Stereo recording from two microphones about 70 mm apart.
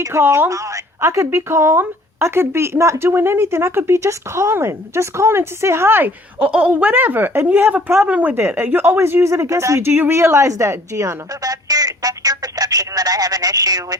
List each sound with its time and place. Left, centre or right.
0.0 s speech: right
6.4 s speech: centre; by 8.0 s right
8.0 s speech: right
8.4 s speech: right
9.3 s speech: right